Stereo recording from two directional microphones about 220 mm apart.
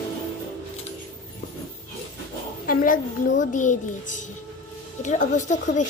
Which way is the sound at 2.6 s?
40° left (ahead or behind).